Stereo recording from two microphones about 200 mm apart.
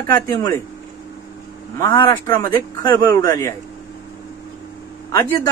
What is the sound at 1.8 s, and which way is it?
Speech, 15° left (ahead or behind).